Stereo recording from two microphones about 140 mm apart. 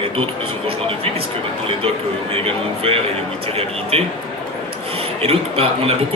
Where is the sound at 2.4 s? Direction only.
40° right (ahead or behind).